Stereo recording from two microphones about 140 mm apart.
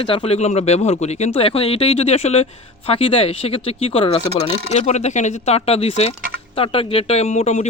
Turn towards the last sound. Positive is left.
turn(degrees=55)  # may be behind; listen again after turning